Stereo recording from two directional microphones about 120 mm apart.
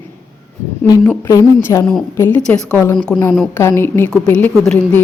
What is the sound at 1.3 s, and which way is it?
A woman's voice, 25° left (ahead or behind).